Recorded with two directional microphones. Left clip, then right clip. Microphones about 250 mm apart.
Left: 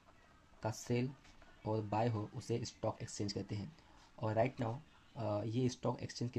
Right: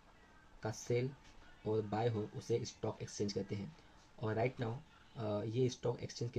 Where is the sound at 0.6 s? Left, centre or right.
Left.